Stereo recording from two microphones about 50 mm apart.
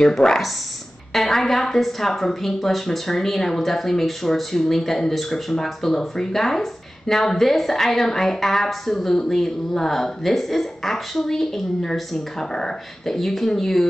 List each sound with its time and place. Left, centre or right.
0.0 s a woman's voice: centre